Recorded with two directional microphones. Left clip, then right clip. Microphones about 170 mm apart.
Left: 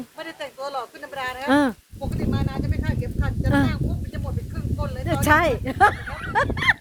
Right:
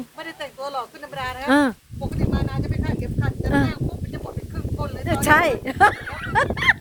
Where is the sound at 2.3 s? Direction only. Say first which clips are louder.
Right 1 dB; 15° right (ahead or behind).